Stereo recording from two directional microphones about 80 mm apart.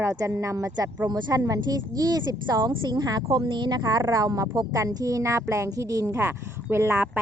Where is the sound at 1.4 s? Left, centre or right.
Right.